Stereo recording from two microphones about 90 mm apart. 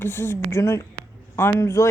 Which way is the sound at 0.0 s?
25° left (ahead or behind).